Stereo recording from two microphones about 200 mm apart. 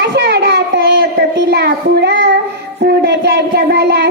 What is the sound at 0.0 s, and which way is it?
Child singing, 55° right (ahead or behind).